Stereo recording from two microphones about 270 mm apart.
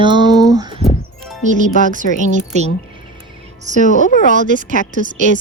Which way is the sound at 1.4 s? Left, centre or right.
Right.